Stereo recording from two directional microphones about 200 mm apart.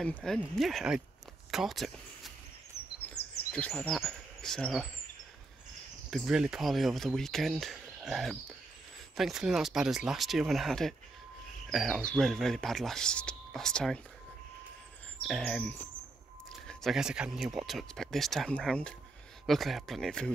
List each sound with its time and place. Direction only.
0.0 s speech: 5° left (ahead or behind)
1.5 s a sound: centre (ahead or behind)
3.2 s bird: 55° left (ahead or behind)
3.5 s speech: 5° left (ahead or behind)
6.0 s speech: centre (ahead or behind)
15.2 s speech: 5° left (ahead or behind)